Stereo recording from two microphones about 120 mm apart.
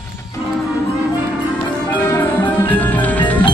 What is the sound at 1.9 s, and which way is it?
Music, 20° left (ahead or behind).